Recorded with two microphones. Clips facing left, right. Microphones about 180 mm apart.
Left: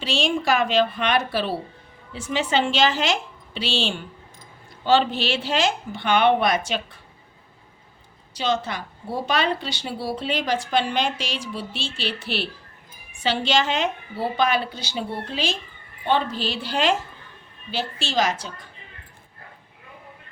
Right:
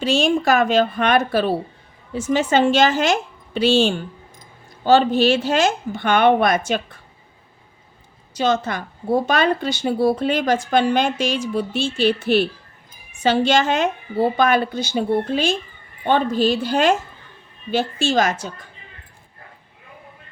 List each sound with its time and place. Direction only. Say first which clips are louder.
0.0 s a woman's voice: right 6 dB; 45° right (ahead or behind)
8.3 s a woman's voice: right 5 dB; 45° right (ahead or behind)